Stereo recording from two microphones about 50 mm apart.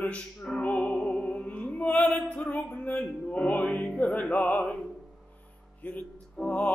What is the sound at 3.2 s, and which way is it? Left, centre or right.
Music, left.